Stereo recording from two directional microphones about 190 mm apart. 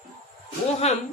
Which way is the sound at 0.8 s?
35° left (ahead or behind).